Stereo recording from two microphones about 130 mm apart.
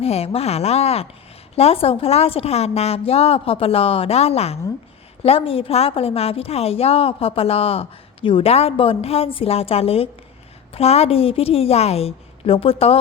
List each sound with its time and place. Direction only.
0.0 s a woman's voice: 50° left (ahead or behind)